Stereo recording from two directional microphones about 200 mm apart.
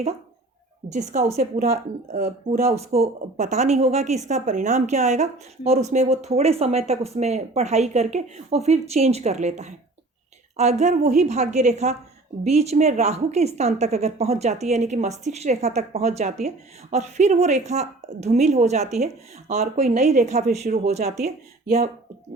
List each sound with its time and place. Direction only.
0.9 s speech: 35° right (ahead or behind)
2.5 s speech: 30° right (ahead or behind)